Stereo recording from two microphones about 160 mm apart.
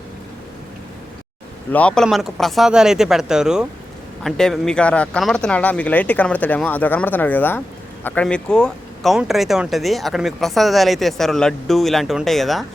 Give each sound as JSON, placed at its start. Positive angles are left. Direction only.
{"t": 1.7, "sound": "speech", "side_deg": 5}